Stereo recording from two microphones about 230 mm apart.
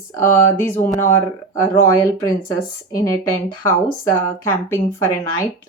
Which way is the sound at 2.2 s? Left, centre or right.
Centre.